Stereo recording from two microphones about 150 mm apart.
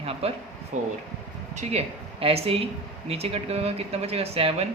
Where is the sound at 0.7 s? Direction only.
55° right (ahead or behind).